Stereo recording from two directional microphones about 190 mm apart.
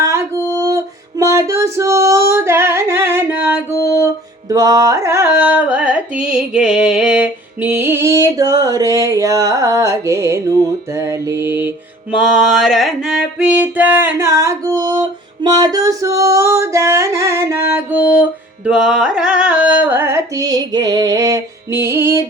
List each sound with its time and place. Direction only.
0.0 s music: 15° right (ahead or behind)